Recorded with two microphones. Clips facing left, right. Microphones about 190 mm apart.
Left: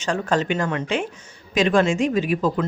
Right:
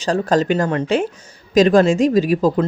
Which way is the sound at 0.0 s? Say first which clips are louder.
Right 5 dB; 35° right (ahead or behind).